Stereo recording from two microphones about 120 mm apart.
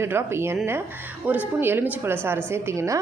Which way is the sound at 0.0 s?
20° right (ahead or behind).